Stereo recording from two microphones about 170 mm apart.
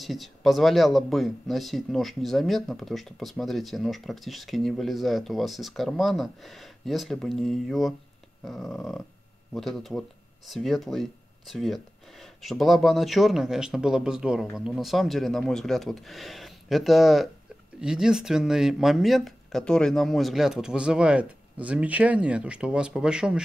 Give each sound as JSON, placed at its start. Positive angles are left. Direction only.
{"t": 0.0, "sound": "speech", "side_deg": 0}